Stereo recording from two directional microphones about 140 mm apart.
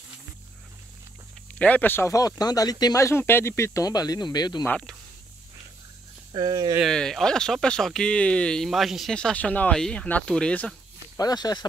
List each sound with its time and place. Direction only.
1.5 s speech: 10° left (ahead or behind); by 4.6 s 30° left (ahead or behind)
4.6 s speech: 5° left (ahead or behind)
6.3 s speech: 30° right (ahead or behind)
6.8 s speech: 5° left (ahead or behind)
11.1 s speech: 30° left (ahead or behind)